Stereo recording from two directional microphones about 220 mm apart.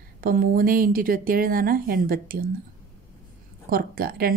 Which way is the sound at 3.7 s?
40° right (ahead or behind).